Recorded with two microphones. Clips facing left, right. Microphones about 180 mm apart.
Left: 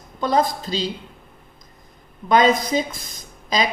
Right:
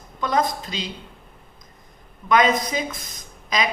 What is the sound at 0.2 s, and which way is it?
Speech, 30° left (ahead or behind).